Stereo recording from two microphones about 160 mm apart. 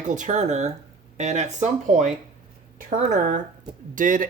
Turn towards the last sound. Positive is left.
turn(degrees=-55)  # may be behind; listen again after turning